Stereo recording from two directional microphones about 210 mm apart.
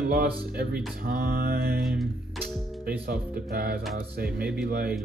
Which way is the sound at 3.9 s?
45° right (ahead or behind).